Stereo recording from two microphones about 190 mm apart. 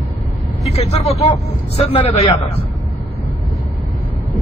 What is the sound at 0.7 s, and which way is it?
A man's voice, 35° left (ahead or behind).